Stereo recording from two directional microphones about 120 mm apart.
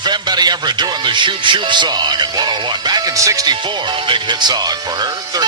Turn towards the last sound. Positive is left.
turn(degrees=-35)  # may be behind; listen again after turning